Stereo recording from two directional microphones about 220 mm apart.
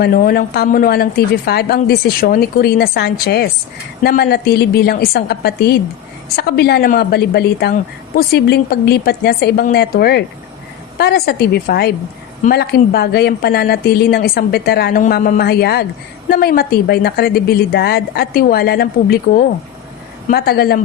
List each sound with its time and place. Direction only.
0.0 s a woman's voice: 40° left (ahead or behind)